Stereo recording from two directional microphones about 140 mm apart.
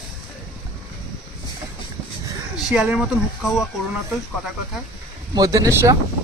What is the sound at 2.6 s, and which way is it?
Speech, 5° right (ahead or behind).